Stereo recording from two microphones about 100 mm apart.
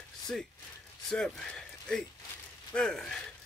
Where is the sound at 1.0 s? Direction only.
5° left (ahead or behind).